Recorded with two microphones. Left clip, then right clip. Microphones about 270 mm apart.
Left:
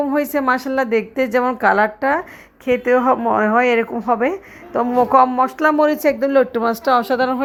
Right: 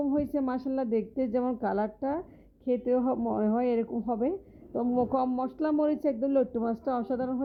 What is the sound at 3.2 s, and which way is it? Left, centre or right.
A man's voice, left.